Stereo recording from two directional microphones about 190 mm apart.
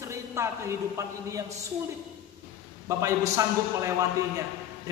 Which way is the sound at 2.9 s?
15° right (ahead or behind).